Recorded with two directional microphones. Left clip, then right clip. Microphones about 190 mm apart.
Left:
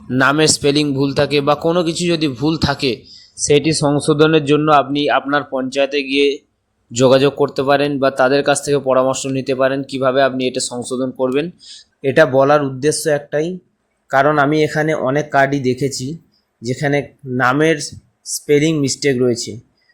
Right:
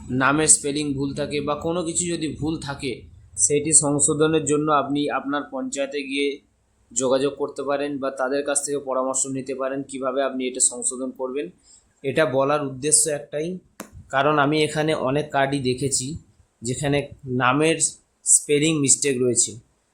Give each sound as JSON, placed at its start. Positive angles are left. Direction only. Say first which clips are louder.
{"t": 0.2, "sound": "speech", "louder": "left 7 dB", "side_deg": 35}